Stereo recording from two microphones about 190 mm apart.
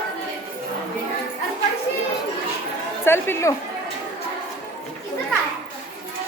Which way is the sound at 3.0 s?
10° left (ahead or behind).